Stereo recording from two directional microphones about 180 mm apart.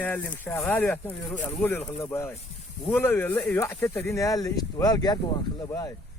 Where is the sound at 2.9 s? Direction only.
10° left (ahead or behind).